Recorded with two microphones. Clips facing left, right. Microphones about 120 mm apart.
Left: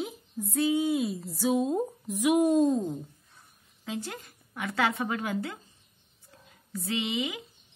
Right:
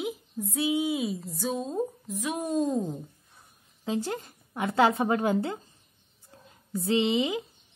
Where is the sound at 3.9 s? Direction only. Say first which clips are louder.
Right 6 dB; 30° right (ahead or behind).